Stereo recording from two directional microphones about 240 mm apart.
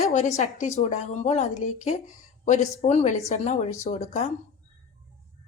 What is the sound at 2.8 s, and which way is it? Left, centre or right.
Speech, left.